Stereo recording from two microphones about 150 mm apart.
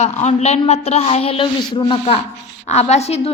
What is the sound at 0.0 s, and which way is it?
A man's voice, 50° left (ahead or behind).